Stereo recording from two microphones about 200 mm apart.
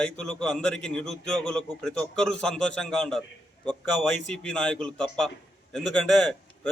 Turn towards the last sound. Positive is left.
turn(degrees=0)  # may be behind; listen again after turning